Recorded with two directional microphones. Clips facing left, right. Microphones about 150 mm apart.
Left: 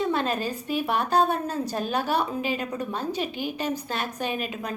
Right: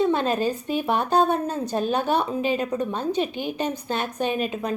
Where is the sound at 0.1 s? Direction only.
30° right (ahead or behind).